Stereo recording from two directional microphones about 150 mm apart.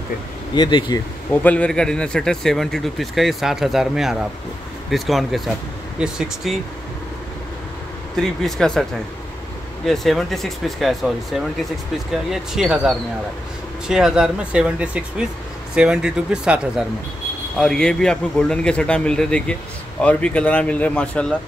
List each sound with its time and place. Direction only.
0.6 s speech: 30° left (ahead or behind)
1.3 s speech: 10° left (ahead or behind)
8.2 s speech: 5° left (ahead or behind)
9.8 s speech: centre (ahead or behind)